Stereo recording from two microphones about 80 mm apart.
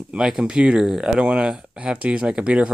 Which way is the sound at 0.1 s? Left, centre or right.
Centre.